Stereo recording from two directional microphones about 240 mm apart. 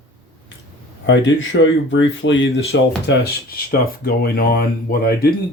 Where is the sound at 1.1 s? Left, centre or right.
Left.